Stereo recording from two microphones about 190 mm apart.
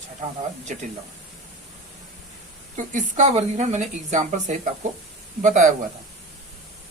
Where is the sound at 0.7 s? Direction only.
40° right (ahead or behind).